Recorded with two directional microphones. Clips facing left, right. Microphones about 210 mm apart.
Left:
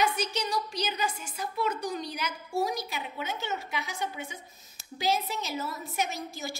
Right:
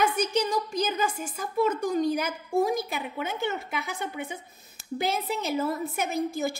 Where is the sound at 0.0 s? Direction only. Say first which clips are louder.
Right 4 dB; 55° right (ahead or behind).